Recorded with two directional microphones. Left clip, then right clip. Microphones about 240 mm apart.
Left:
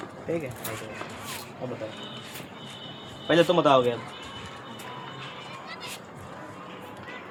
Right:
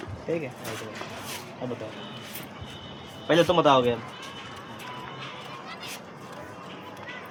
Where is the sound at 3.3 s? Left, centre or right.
Right.